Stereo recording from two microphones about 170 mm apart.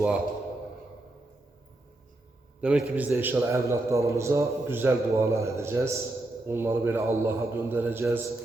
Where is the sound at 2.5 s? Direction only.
5° right (ahead or behind).